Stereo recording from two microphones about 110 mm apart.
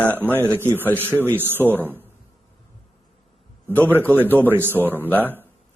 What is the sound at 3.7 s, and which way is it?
Speech, 15° left (ahead or behind).